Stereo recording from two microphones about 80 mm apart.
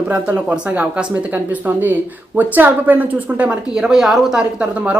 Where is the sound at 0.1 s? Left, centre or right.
Right.